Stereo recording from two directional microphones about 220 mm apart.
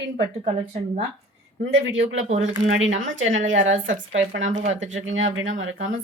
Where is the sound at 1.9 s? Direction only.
65° right (ahead or behind).